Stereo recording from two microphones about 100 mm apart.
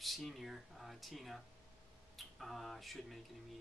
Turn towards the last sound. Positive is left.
turn(degrees=0)  # may be behind; listen again after turning